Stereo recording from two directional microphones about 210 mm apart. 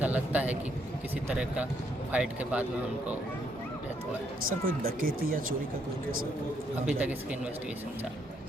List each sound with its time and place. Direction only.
0.0 s a sound: 5° right (ahead or behind)
1.3 s speech: 5° right (ahead or behind)
4.4 s speech: 45° right (ahead or behind)
6.8 s speech: 5° right (ahead or behind)